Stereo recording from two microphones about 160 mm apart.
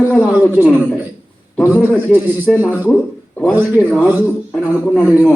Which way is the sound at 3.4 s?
10° right (ahead or behind).